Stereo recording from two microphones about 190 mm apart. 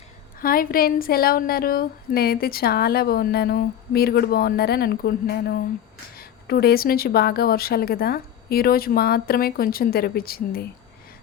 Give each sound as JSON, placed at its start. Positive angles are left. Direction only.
{"t": 0.3, "sound": "a woman's voice", "side_deg": 50}